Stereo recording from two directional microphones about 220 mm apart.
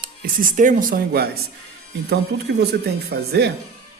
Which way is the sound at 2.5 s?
50° right (ahead or behind).